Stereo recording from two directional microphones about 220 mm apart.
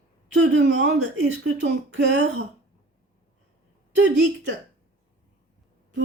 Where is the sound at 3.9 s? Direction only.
55° right (ahead or behind).